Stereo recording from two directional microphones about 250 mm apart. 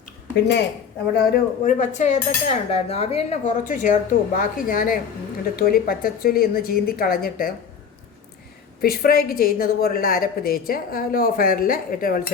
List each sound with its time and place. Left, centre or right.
1.1 s cutlery: left
4.4 s a woman's voice: left
8.8 s a woman's voice: left